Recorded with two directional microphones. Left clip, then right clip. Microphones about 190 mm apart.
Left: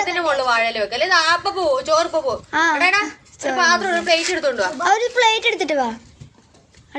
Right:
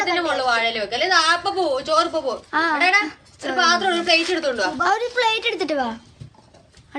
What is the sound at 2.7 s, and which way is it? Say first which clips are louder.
A child's voice: left 1 dB; centre (ahead or behind).